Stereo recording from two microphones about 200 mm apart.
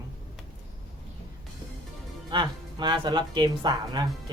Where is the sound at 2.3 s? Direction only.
20° right (ahead or behind).